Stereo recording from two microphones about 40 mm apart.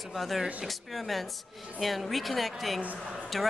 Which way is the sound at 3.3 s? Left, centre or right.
Centre.